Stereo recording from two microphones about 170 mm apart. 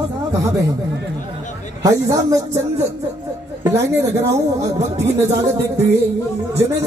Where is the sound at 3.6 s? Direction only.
20° right (ahead or behind).